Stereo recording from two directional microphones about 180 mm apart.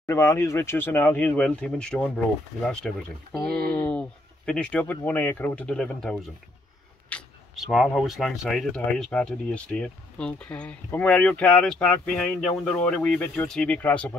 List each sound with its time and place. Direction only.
0.0 s speech: 15° left (ahead or behind)
3.4 s speech: 60° right (ahead or behind)
3.7 s a sound: 5° left (ahead or behind)
4.5 s speech: 5° left (ahead or behind)